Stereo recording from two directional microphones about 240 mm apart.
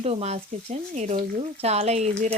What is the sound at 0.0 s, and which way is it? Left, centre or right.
Speech, right.